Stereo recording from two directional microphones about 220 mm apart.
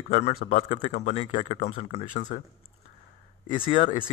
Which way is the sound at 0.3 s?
40° left (ahead or behind).